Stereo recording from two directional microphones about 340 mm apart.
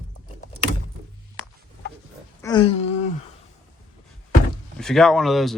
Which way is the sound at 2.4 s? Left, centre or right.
Centre.